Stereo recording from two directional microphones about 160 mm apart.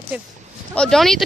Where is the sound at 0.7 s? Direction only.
5° left (ahead or behind).